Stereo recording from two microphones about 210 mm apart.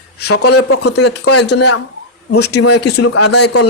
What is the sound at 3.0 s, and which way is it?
Speech, 90° left.